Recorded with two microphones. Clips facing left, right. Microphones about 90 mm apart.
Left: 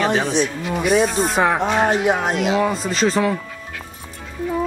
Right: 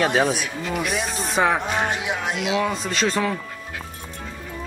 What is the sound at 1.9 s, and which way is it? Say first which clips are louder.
Speech: left 7 dB; 45° left (ahead or behind).